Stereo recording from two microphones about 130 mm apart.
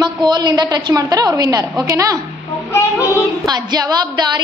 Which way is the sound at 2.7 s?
20° left (ahead or behind).